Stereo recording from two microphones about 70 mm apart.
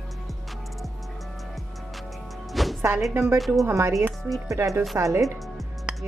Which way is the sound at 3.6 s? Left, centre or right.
Right.